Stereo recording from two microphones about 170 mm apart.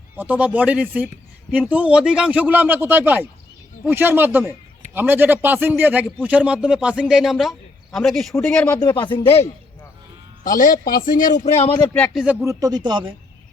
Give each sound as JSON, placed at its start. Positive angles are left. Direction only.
{"t": 0.2, "sound": "a man's voice", "side_deg": -10}
{"t": 8.8, "sound": "speech", "side_deg": 25}
{"t": 9.2, "sound": "a man's voice", "side_deg": 35}
{"t": 10.4, "sound": "a man's voice", "side_deg": 55}
{"t": 12.1, "sound": "a man's voice", "side_deg": -5}
{"t": 12.5, "sound": "speech", "side_deg": -20}